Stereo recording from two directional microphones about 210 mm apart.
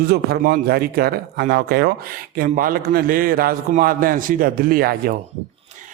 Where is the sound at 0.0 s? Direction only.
50° right (ahead or behind).